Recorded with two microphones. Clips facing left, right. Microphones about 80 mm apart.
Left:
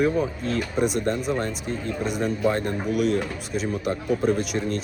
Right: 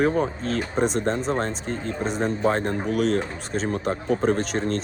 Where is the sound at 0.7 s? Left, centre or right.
Centre.